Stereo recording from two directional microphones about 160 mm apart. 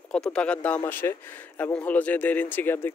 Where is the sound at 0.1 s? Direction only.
5° left (ahead or behind).